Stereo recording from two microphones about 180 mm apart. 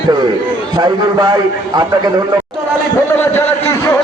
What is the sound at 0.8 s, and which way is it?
A man's voice, 25° right (ahead or behind).